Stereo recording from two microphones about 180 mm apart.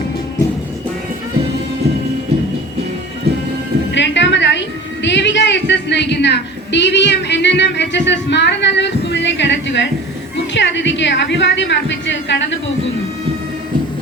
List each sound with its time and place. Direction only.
3.9 s music: 80° left
5.0 s a woman's voice: 80° left